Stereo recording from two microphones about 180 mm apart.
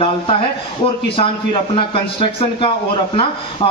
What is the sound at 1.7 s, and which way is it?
Speech, 30° left (ahead or behind).